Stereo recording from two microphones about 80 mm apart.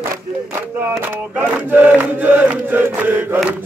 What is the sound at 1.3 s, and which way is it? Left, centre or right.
Chant, right.